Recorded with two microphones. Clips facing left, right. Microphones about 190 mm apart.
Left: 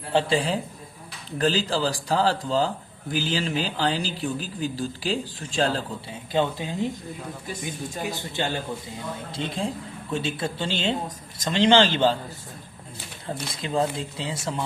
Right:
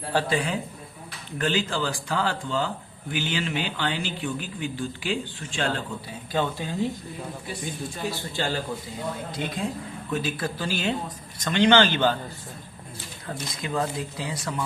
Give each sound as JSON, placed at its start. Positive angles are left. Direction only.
{"t": 0.1, "sound": "speech", "side_deg": 25}
{"t": 6.3, "sound": "speech", "side_deg": 20}
{"t": 13.5, "sound": "speech", "side_deg": 30}